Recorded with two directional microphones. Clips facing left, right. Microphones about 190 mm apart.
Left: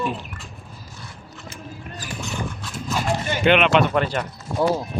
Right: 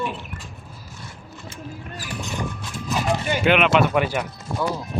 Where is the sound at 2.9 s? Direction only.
15° right (ahead or behind).